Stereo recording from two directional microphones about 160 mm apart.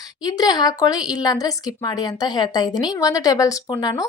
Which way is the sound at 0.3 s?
25° left (ahead or behind).